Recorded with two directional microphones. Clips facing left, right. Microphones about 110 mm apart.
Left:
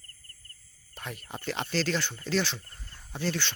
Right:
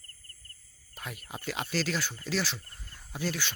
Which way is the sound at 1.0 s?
5° right (ahead or behind).